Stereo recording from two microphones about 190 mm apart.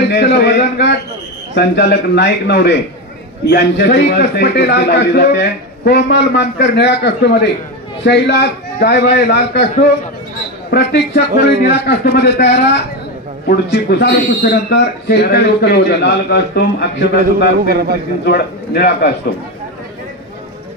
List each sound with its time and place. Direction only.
0.1 s a man's voice: 60° left (ahead or behind)
10.7 s a man's voice: 60° left (ahead or behind)
17.6 s speech: 50° right (ahead or behind)
18.2 s a man's voice: 55° left (ahead or behind)